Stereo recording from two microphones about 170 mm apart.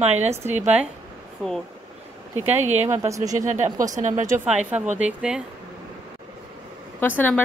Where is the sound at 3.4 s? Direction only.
45° right (ahead or behind).